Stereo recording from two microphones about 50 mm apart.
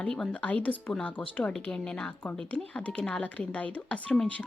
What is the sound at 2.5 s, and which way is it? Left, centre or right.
Speech, left.